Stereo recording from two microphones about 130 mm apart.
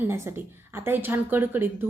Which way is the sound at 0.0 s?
20° right (ahead or behind).